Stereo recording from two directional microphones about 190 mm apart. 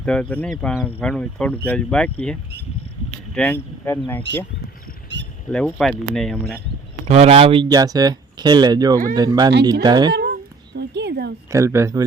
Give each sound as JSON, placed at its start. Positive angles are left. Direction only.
{"t": 0.0, "sound": "speech", "side_deg": 5}
{"t": 5.1, "sound": "a sound", "side_deg": -65}
{"t": 5.5, "sound": "speech", "side_deg": 0}
{"t": 7.1, "sound": "speech", "side_deg": -35}
{"t": 10.1, "sound": "a sound", "side_deg": -55}
{"t": 11.5, "sound": "speech", "side_deg": -15}